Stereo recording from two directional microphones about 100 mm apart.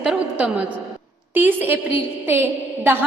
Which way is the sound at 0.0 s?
10° right (ahead or behind).